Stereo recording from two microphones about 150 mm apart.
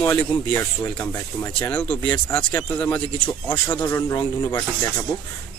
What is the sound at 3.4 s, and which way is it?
Speech, 30° left (ahead or behind).